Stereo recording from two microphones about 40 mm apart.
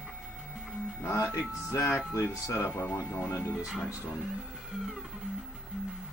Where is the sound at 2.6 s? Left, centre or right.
Left.